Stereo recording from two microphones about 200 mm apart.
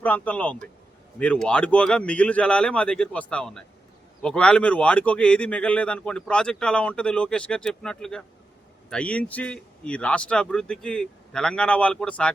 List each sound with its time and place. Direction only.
0.0 s a man's voice: 5° left (ahead or behind)